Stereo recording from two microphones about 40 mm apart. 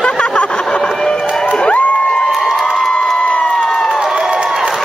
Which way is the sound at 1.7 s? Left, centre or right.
Left.